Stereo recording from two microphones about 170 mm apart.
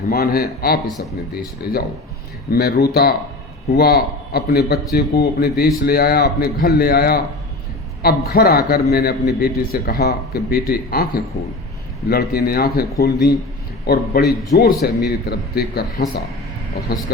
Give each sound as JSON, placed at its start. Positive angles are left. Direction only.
{"t": 0.1, "sound": "a man's voice", "side_deg": 60}